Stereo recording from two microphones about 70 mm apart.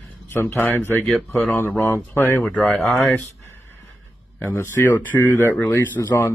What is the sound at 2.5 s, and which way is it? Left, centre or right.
Mantra, left.